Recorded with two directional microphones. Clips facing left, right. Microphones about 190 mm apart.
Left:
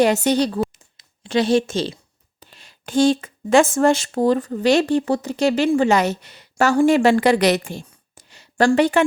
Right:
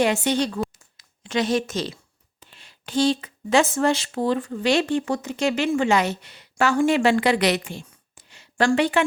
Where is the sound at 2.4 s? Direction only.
40° left (ahead or behind).